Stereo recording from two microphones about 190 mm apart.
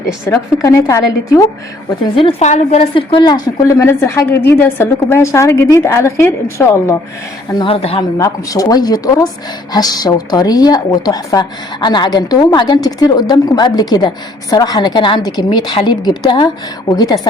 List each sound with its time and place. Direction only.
0.3 s a woman's voice: 15° left (ahead or behind)
2.1 s a woman's voice: 35° left (ahead or behind); by 6.9 s 15° left (ahead or behind)
7.6 s speech: 30° left (ahead or behind)
8.2 s speech: 20° left (ahead or behind)